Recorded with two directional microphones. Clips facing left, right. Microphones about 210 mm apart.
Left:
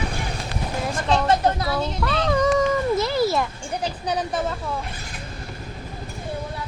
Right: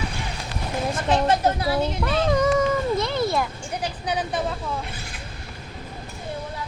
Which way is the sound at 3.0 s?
5° left (ahead or behind).